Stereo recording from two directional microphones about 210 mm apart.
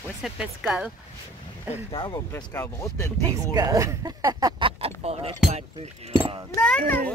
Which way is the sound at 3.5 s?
15° right (ahead or behind).